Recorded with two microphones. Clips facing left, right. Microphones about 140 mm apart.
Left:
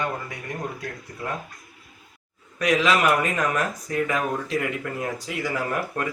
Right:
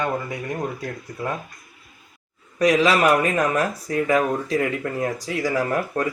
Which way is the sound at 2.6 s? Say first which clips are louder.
Right 3 dB; 30° right (ahead or behind).